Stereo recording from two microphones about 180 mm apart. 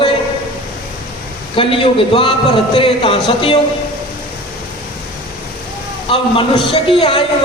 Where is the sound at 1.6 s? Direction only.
30° left (ahead or behind).